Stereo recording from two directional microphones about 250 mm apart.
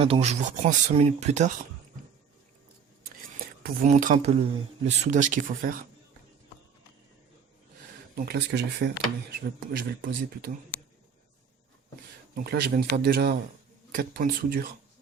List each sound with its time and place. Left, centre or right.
0.0 s speech: right
3.0 s a sound: right
4.9 s speech: right
8.1 s speech: right
12.3 s speech: right